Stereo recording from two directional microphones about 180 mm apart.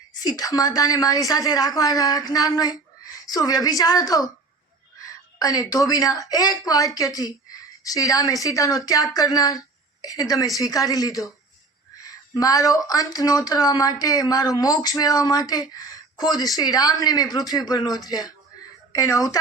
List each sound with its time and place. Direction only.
0.1 s speech: 20° left (ahead or behind)